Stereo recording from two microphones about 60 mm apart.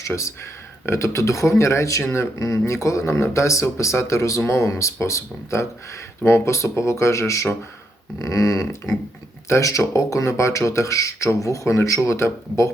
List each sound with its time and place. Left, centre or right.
0.0 s speech: left
8.2 s a sound: left
9.5 s speech: left